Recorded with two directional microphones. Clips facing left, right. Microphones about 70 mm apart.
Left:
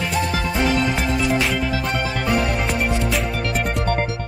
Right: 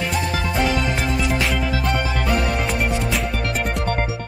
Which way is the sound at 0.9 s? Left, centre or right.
Centre.